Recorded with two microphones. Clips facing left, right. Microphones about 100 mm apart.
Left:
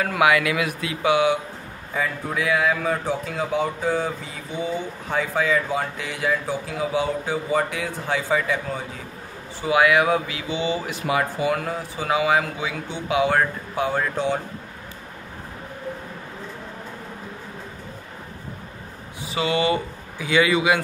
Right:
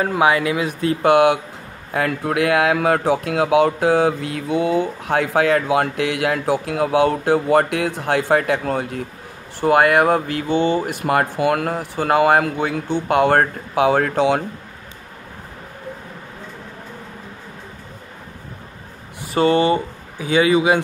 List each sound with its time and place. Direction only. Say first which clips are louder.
0.0 s speech: right 2 dB; 30° right (ahead or behind)
1.0 s speech: right 5 dB; 60° right (ahead or behind)
9.6 s speech: right 4 dB; 55° right (ahead or behind); by 14.4 s 75° right (ahead or behind)
19.2 s speech: right 6 dB; 45° right (ahead or behind); by 20.8 s 30° right (ahead or behind)